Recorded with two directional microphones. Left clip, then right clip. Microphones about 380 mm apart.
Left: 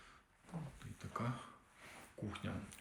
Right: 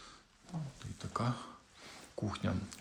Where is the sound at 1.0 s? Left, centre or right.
Centre.